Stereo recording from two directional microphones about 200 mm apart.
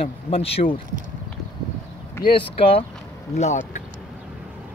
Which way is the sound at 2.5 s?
30° left (ahead or behind).